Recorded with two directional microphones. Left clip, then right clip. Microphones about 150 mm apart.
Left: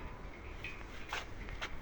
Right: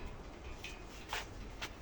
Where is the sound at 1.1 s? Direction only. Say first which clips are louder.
Even; 90° left.